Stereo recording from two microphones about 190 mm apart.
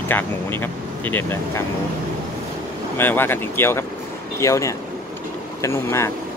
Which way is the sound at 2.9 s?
10° left (ahead or behind).